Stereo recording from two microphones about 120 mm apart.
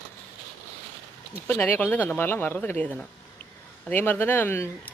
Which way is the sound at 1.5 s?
15° left (ahead or behind).